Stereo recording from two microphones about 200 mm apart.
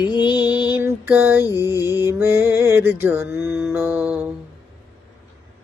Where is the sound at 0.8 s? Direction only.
10° right (ahead or behind).